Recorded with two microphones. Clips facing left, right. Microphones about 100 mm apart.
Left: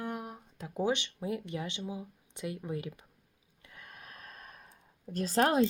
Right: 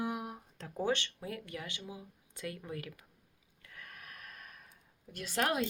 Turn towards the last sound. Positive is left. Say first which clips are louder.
# left 7 dB
turn(degrees=30)  # may be behind; listen again after turning